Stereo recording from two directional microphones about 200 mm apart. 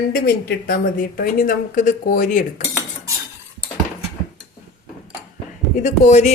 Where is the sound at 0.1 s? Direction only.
50° left (ahead or behind).